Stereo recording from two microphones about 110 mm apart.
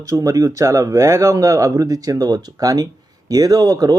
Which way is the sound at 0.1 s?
30° right (ahead or behind).